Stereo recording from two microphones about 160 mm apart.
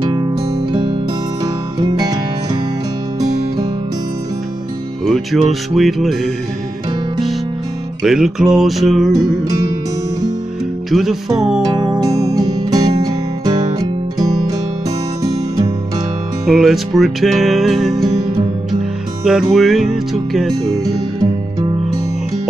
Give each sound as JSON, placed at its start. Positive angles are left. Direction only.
{"t": 0.1, "sound": "music", "side_deg": -25}
{"t": 5.0, "sound": "music", "side_deg": 0}
{"t": 8.0, "sound": "music", "side_deg": -5}
{"t": 10.9, "sound": "music", "side_deg": 0}
{"t": 11.6, "sound": "music", "side_deg": -25}
{"t": 16.4, "sound": "music", "side_deg": 0}
{"t": 20.8, "sound": "music", "side_deg": -25}